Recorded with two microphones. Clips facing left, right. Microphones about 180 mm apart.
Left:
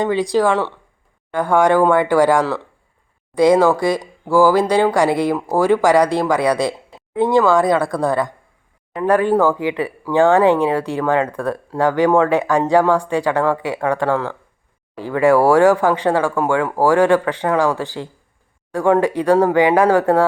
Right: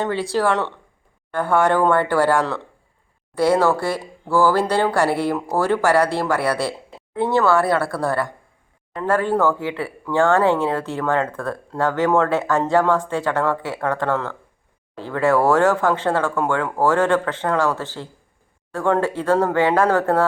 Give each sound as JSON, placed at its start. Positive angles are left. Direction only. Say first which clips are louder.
{"t": 0.0, "sound": "speech", "louder": "left 4 dB", "side_deg": 15}